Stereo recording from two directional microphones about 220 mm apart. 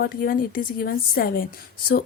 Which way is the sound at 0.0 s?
40° left (ahead or behind).